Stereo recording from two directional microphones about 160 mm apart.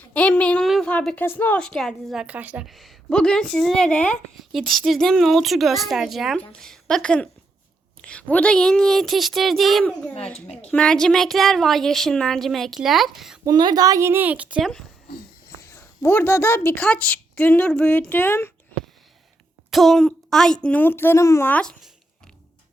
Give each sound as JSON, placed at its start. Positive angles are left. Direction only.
{"t": 0.0, "sound": "a woman's voice", "side_deg": 10}
{"t": 10.4, "sound": "a woman's voice", "side_deg": 40}
{"t": 10.7, "sound": "a woman's voice", "side_deg": 5}
{"t": 13.4, "sound": "a woman's voice", "side_deg": -25}
{"t": 15.7, "sound": "a woman's voice", "side_deg": 15}
{"t": 19.7, "sound": "a woman's voice", "side_deg": 0}